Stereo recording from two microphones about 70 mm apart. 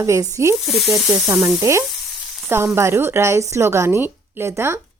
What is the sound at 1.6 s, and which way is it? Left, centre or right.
A woman's voice, right.